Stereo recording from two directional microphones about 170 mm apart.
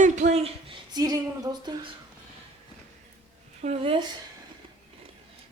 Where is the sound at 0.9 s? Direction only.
20° right (ahead or behind).